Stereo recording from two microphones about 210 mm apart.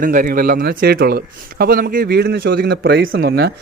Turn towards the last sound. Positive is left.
turn(degrees=-50)  # may be behind; listen again after turning